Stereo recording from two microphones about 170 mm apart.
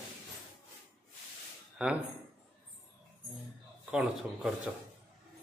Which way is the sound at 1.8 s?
5° right (ahead or behind).